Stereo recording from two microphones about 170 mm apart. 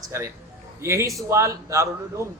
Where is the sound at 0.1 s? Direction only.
15° right (ahead or behind).